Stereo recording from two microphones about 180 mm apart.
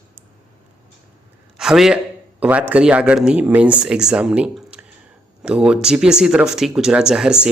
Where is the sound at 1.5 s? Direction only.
Centre (ahead or behind).